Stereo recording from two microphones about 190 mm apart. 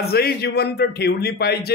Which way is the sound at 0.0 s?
55° left (ahead or behind).